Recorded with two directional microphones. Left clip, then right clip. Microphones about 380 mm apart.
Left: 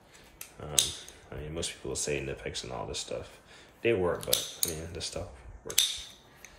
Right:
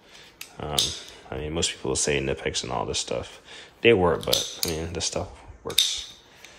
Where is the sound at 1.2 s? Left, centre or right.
Centre.